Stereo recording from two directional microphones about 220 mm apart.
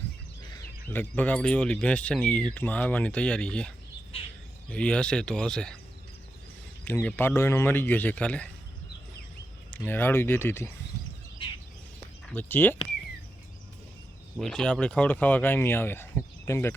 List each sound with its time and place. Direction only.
0.5 s speech: 10° left (ahead or behind)
4.1 s speech: 25° left (ahead or behind)
4.7 s speech: 5° left (ahead or behind)
6.8 s speech: 10° left (ahead or behind)
9.7 s speech: 10° left (ahead or behind)
12.2 s speech: 10° left (ahead or behind)
14.3 s speech: centre (ahead or behind)